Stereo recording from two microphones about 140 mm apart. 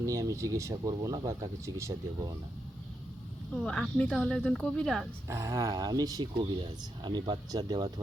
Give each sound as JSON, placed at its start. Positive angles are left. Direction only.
{"t": 0.0, "sound": "speech", "side_deg": -25}
{"t": 3.5, "sound": "speech", "side_deg": 5}
{"t": 5.3, "sound": "speech", "side_deg": -25}